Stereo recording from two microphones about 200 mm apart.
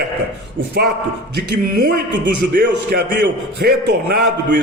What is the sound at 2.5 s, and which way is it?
A man's voice, 45° right (ahead or behind).